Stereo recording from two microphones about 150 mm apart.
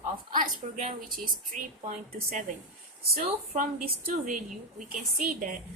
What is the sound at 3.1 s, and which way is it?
Speech, 75° right (ahead or behind).